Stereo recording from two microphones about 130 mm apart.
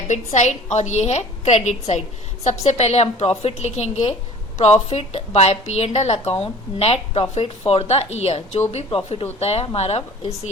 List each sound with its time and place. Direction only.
0.1 s a woman's voice: 65° left (ahead or behind)